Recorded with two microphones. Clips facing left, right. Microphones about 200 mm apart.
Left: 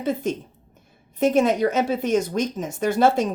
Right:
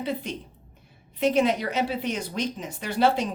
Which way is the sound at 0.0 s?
45° left (ahead or behind).